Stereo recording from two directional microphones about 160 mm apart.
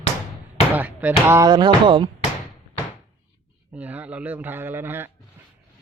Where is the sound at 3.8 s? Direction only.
10° right (ahead or behind).